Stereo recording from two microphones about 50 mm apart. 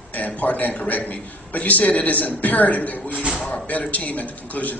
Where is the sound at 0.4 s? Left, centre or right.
Left.